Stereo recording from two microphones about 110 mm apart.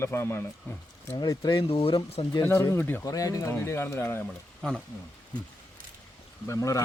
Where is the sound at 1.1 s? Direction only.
35° left (ahead or behind).